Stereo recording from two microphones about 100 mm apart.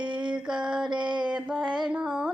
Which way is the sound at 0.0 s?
50° right (ahead or behind).